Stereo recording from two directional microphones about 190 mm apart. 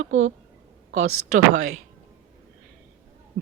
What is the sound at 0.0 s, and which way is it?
Speech, 40° right (ahead or behind).